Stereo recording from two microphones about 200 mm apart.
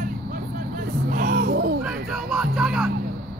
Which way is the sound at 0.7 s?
50° right (ahead or behind).